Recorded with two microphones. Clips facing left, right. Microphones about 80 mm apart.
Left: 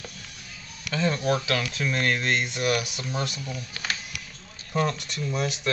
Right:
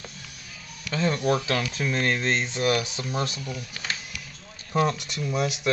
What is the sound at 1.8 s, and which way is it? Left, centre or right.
Speech, centre.